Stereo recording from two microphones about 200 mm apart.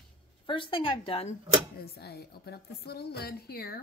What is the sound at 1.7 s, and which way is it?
A woman's voice, 50° left (ahead or behind).